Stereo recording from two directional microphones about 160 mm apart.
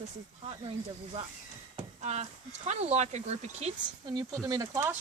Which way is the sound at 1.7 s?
45° right (ahead or behind).